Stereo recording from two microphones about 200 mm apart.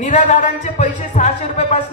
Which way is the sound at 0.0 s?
40° left (ahead or behind).